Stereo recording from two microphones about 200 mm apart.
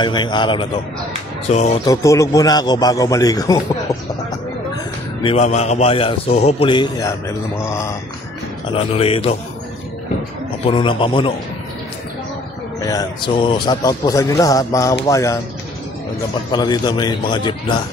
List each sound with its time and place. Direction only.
0.0 s a man's voice: 20° left (ahead or behind)
1.5 s speech: 35° left (ahead or behind)
1.9 s a man's voice: 15° left (ahead or behind)
5.2 s a man's voice: 30° left (ahead or behind); by 7.9 s 15° left (ahead or behind)
8.7 s a man's voice: 30° left (ahead or behind)
10.7 s a man's voice: 25° left (ahead or behind)
12.8 s a man's voice: 20° left (ahead or behind)
16.5 s a man's voice: 20° left (ahead or behind)